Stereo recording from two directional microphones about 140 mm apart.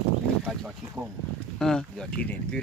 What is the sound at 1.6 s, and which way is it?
Speech, 5° left (ahead or behind).